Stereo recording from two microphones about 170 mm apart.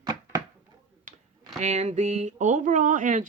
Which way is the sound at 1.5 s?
45° right (ahead or behind).